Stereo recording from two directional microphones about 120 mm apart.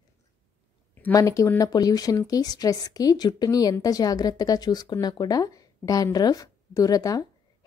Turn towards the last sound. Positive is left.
turn(degrees=30)  # may be behind; listen again after turning